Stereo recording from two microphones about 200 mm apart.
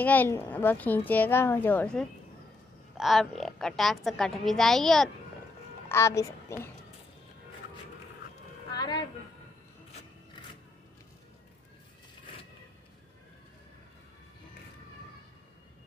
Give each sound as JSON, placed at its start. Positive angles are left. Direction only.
{"t": 0.0, "sound": "a woman's voice", "side_deg": 10}
{"t": 5.9, "sound": "a child's voice", "side_deg": 15}
{"t": 8.6, "sound": "music", "side_deg": 20}